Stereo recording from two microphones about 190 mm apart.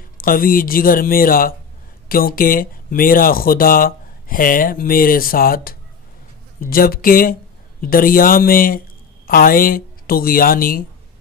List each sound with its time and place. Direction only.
0.2 s speech: 50° left (ahead or behind)